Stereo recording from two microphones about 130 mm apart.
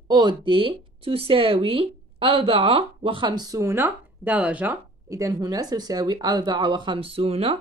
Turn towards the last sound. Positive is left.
turn(degrees=-50)  # may be behind; listen again after turning